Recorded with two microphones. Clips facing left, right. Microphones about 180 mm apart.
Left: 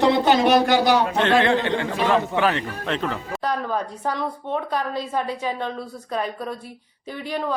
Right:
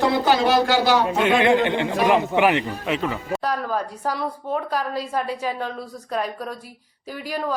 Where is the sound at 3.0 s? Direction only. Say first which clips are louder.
Right 2 dB; 5° right (ahead or behind).